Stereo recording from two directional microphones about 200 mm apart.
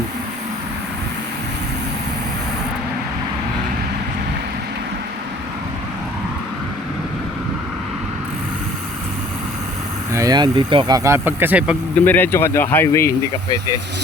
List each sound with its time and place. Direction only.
10.1 s speech: 15° right (ahead or behind)
12.0 s speech: 10° left (ahead or behind)